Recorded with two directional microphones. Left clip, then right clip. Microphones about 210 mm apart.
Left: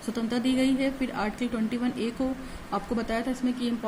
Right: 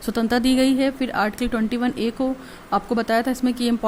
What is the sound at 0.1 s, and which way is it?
Speech, 45° right (ahead or behind).